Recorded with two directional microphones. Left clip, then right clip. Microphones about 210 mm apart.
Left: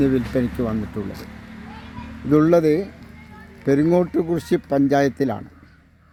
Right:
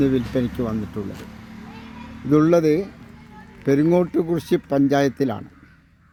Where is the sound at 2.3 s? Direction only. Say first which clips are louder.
Left 1 dB; centre (ahead or behind).